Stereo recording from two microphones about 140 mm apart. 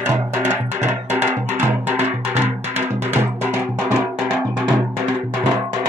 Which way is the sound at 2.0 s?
55° right (ahead or behind).